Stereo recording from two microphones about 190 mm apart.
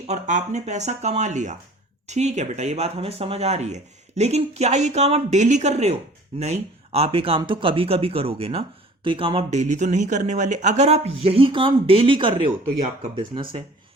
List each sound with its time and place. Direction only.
0.1 s speech: 40° right (ahead or behind)